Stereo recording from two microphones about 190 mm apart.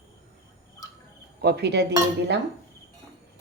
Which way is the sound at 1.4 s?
60° right (ahead or behind).